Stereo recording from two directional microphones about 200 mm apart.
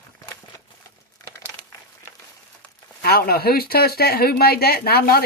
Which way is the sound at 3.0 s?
50° left (ahead or behind).